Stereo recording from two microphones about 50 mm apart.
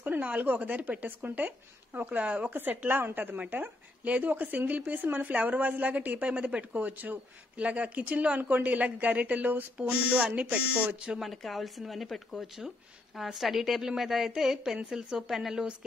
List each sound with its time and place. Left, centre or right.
0.0 s a woman's voice: right
11.1 s speech: centre